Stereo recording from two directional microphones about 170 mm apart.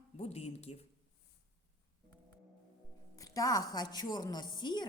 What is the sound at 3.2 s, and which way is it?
A woman's voice, 20° left (ahead or behind).